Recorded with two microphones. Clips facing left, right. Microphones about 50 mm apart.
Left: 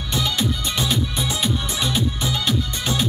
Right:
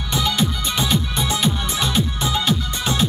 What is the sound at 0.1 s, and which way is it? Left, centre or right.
Music, right.